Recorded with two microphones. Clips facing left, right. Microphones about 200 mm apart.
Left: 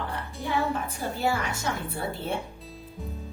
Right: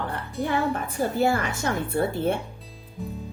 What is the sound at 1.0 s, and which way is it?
A woman's voice, 55° right (ahead or behind).